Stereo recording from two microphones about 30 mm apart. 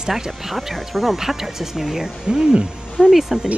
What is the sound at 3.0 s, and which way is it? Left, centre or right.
Speech, centre.